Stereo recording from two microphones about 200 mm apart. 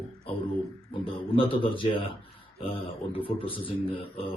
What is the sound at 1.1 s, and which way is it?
Speech, 25° left (ahead or behind).